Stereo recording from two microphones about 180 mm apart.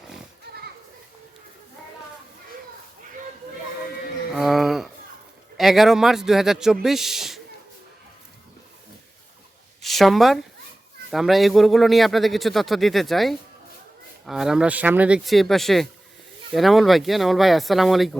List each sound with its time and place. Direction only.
4.4 s a sound: centre (ahead or behind)
5.5 s a man's voice: centre (ahead or behind)
9.8 s a man's voice: centre (ahead or behind)